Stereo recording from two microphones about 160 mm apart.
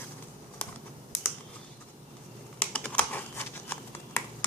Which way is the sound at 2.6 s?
5° left (ahead or behind).